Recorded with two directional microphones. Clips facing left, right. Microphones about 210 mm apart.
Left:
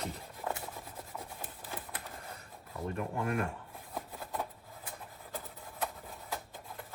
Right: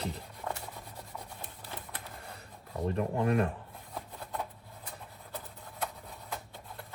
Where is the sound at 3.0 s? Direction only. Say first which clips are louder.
Right 5 dB; 30° right (ahead or behind).